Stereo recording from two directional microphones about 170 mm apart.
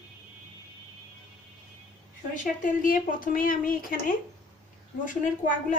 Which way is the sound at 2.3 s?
50° left (ahead or behind).